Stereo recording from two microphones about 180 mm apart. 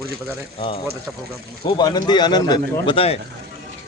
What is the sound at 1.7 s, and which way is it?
Speech, 25° left (ahead or behind).